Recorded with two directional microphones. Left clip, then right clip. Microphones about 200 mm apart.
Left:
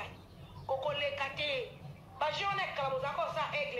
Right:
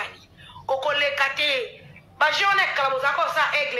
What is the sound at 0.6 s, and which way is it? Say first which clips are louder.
A man's voice: right 12 dB; 45° right (ahead or behind).